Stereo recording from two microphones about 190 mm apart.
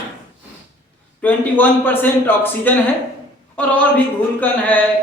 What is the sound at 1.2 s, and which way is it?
A man's voice, 10° left (ahead or behind).